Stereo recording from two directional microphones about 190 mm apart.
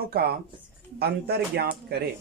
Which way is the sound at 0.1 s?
55° right (ahead or behind).